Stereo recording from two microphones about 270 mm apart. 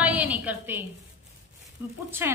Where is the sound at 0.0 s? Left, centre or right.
Centre.